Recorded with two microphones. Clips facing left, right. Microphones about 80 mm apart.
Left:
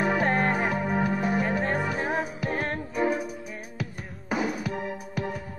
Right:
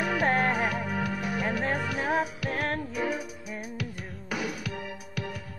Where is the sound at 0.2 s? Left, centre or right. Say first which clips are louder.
Left 1 dB; centre.